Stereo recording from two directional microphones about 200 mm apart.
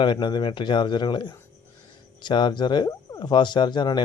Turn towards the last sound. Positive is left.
turn(degrees=20)  # may be behind; listen again after turning